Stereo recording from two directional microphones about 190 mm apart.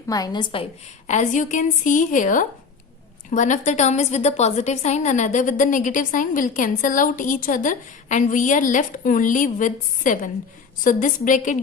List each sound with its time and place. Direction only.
0.1 s a woman's voice: 20° left (ahead or behind); by 11.5 s 40° left (ahead or behind)